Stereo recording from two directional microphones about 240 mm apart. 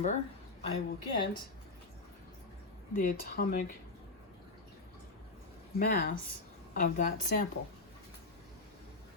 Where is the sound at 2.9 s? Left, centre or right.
Left.